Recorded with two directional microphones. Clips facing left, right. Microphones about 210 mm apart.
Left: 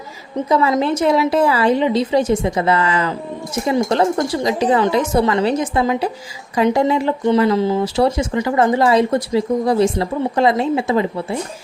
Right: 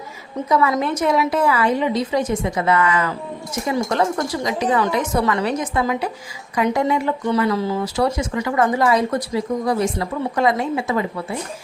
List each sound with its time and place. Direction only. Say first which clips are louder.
0.4 s speech: left 3 dB; 30° left (ahead or behind)